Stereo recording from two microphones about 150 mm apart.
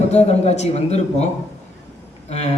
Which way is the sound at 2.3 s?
45° left (ahead or behind).